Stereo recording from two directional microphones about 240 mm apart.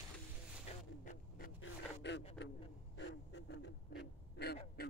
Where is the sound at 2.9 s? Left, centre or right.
Left.